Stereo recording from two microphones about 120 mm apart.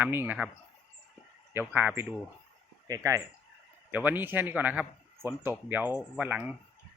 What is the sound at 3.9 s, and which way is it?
Speech, 15° right (ahead or behind).